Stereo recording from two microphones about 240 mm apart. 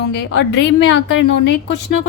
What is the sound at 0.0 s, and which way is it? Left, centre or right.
A woman's voice, left.